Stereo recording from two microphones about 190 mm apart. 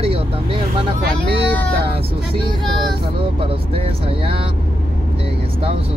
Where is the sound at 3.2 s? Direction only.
30° right (ahead or behind).